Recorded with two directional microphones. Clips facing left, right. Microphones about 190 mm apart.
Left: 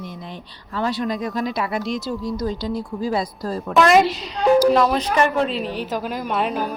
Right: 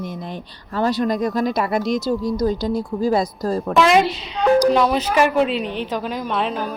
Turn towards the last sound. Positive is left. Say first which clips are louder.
# even
turn(degrees=10)  # may be behind; listen again after turning